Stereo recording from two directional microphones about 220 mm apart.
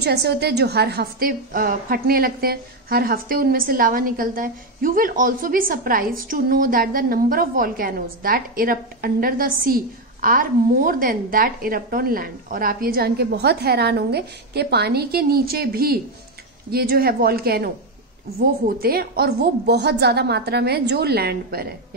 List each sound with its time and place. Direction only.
0.0 s a woman's voice: 50° right (ahead or behind)